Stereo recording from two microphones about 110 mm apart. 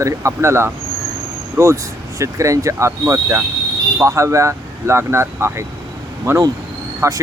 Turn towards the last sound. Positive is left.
turn(degrees=-30)  # may be behind; listen again after turning